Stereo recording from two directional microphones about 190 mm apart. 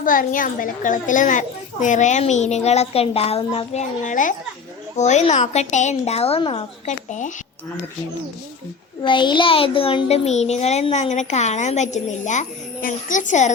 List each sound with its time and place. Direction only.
0.0 s a child's voice: 45° left (ahead or behind)
9.0 s a child's voice: 25° left (ahead or behind); by 13.5 s 40° left (ahead or behind)